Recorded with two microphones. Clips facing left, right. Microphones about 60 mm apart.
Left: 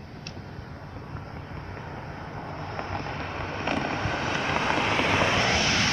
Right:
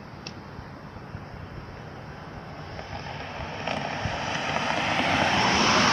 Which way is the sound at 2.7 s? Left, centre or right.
Left.